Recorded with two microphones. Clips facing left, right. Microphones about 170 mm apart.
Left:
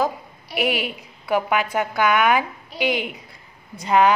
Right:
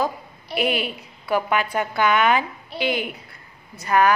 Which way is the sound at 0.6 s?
15° left (ahead or behind).